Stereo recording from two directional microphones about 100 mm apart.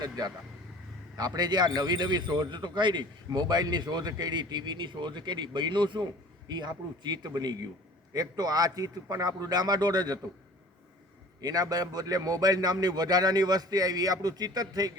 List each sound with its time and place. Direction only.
1.1 s a man's voice: 40° right (ahead or behind)
11.3 s a man's voice: 40° right (ahead or behind)